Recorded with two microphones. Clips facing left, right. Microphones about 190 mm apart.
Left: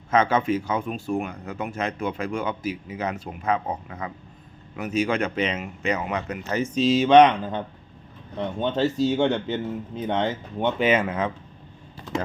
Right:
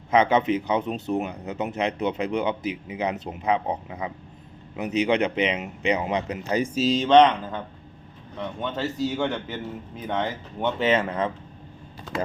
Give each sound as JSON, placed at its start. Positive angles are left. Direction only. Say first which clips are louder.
{"t": 0.1, "sound": "speech", "louder": "right 1 dB", "side_deg": -15}
{"t": 6.7, "sound": "speech", "louder": "left 2 dB", "side_deg": 0}
{"t": 8.4, "sound": "a man's voice", "louder": "left 5 dB", "side_deg": 30}